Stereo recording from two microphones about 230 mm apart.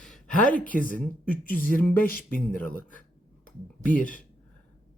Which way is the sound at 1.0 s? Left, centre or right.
Centre.